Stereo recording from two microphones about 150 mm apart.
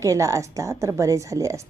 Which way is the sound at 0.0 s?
20° right (ahead or behind).